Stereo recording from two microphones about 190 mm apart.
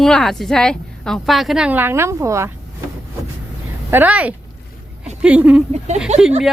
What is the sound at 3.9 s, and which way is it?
Speech, 10° right (ahead or behind).